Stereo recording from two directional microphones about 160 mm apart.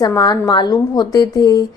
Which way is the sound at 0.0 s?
25° left (ahead or behind).